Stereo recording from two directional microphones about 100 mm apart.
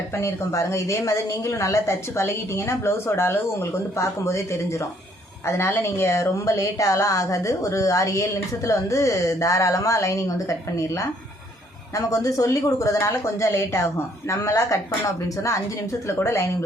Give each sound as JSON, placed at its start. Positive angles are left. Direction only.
{"t": 0.1, "sound": "speech", "side_deg": 30}
{"t": 11.9, "sound": "speech", "side_deg": 35}